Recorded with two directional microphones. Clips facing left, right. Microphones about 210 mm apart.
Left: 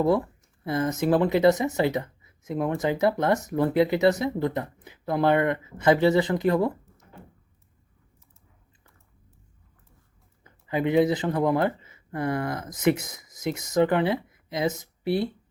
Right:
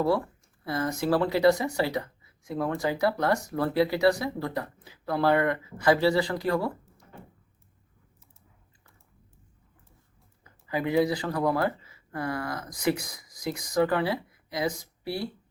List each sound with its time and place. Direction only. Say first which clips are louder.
0.6 s speech: left 3 dB; 20° left (ahead or behind)
10.4 s speech: left 4 dB; 20° left (ahead or behind)